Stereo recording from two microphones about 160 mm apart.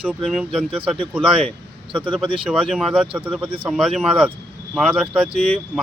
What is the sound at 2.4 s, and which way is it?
Speech, centre (ahead or behind).